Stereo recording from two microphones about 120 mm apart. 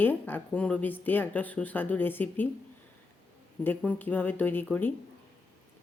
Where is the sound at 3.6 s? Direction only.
15° left (ahead or behind).